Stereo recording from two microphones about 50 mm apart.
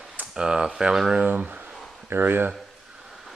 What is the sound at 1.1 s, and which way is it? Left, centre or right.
Speech, right.